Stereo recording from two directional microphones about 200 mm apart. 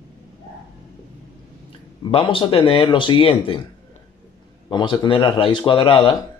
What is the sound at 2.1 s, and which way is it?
Speech, 25° left (ahead or behind).